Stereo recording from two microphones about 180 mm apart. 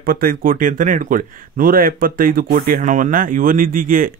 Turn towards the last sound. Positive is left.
turn(degrees=-50)  # may be behind; listen again after turning